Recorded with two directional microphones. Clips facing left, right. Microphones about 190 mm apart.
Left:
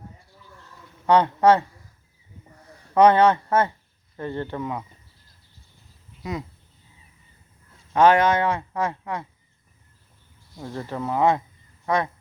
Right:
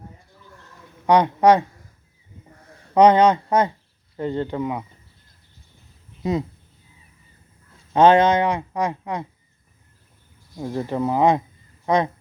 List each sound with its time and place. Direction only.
1.0 s speech: 15° right (ahead or behind)
2.9 s speech: 15° right (ahead or behind)
6.2 s speech: 25° right (ahead or behind)
7.9 s speech: 20° right (ahead or behind)
10.5 s speech: 15° right (ahead or behind)